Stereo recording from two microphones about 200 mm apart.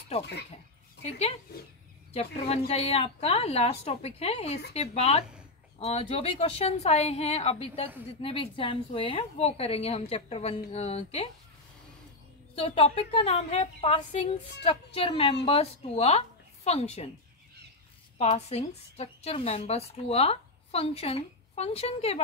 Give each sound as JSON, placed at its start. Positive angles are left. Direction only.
{"t": 0.2, "sound": "speech", "side_deg": 55}
{"t": 1.0, "sound": "speech", "side_deg": 30}
{"t": 12.5, "sound": "a woman's voice", "side_deg": 30}
{"t": 18.1, "sound": "speech", "side_deg": 35}